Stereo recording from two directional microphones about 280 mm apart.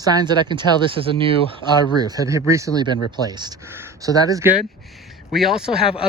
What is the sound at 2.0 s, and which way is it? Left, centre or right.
Speech, centre.